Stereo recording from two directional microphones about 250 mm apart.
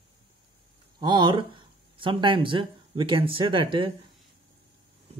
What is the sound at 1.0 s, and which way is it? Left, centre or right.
Speech, centre.